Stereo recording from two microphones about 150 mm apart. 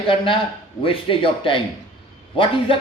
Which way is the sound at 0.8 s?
35° left (ahead or behind).